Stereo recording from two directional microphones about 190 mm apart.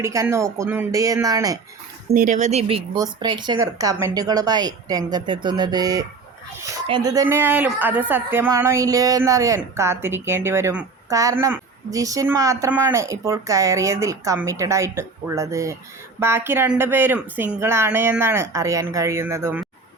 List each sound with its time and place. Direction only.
0.0 s speech: 15° right (ahead or behind)
2.0 s speech: 50° right (ahead or behind); by 19.6 s 15° right (ahead or behind)